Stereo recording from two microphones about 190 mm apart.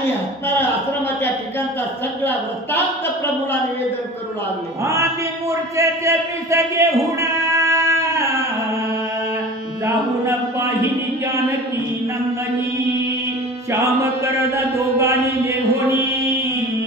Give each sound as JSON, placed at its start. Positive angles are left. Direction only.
{"t": 5.5, "sound": "a man's voice", "side_deg": -15}
{"t": 9.8, "sound": "speech", "side_deg": -15}
{"t": 14.2, "sound": "mantra", "side_deg": -15}